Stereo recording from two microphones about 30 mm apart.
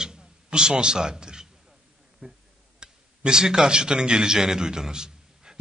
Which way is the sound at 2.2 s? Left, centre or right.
Right.